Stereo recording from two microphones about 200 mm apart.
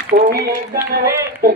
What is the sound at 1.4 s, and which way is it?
Speech, 50° right (ahead or behind).